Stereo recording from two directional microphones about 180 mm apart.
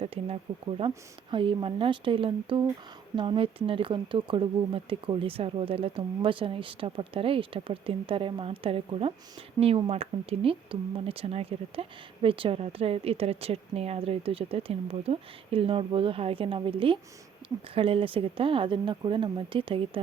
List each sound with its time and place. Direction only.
0.0 s speech: 30° right (ahead or behind)